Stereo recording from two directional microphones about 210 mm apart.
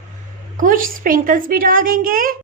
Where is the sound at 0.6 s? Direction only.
40° right (ahead or behind).